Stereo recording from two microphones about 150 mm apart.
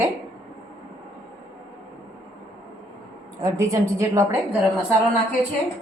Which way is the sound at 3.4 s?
20° right (ahead or behind).